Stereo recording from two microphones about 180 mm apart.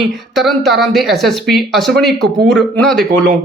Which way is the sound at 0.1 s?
Centre (ahead or behind).